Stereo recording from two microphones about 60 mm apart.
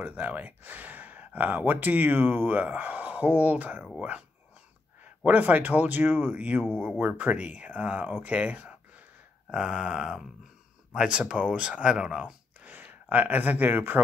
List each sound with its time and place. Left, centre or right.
0.0 s speech: right
5.2 s speech: right
12.6 s speech: right